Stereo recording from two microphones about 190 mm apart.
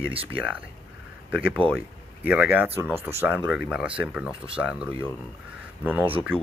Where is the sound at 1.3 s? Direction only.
10° right (ahead or behind).